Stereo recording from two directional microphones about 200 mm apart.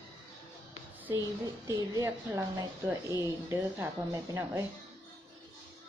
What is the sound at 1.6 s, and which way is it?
A woman's voice, 15° right (ahead or behind).